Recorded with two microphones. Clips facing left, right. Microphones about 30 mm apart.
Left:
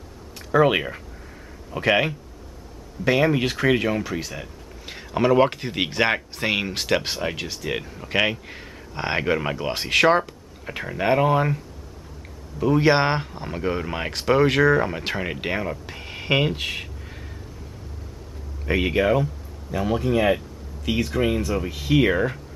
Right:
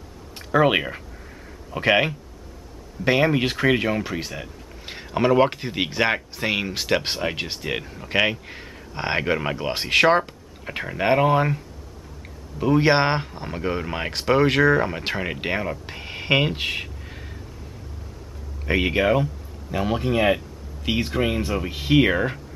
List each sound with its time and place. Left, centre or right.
0.5 s speech: centre
7.0 s speech: centre
7.3 s speech: right
7.7 s speech: centre
18.7 s speech: centre
22.0 s speech: centre